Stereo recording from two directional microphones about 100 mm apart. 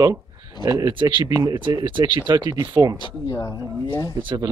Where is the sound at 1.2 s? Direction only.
35° right (ahead or behind).